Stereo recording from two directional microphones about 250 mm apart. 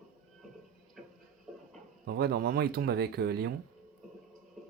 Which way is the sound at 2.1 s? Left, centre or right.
Right.